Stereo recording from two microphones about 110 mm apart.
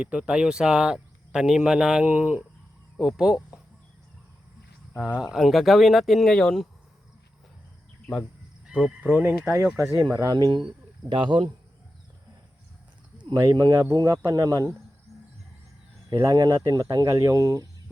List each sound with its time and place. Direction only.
0.0 s speech: 10° right (ahead or behind)
4.9 s speech: 10° right (ahead or behind)
8.6 s speech: 10° right (ahead or behind)
9.9 s speech: 30° right (ahead or behind)
13.2 s speech: 35° right (ahead or behind)
15.1 s a sound: centre (ahead or behind)
16.3 s speech: 35° right (ahead or behind)